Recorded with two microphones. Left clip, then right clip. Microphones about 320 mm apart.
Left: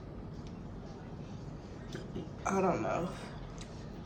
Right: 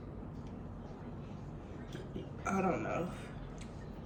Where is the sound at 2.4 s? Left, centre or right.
Centre.